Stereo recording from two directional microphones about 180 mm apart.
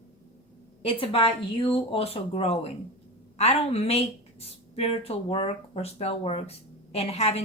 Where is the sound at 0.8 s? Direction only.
30° left (ahead or behind).